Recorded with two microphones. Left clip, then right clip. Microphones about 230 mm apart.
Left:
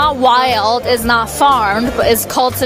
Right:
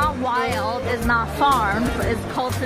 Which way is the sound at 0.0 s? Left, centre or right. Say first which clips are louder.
Left 10 dB; left.